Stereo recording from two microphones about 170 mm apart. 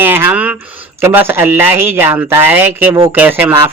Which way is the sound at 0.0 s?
10° right (ahead or behind).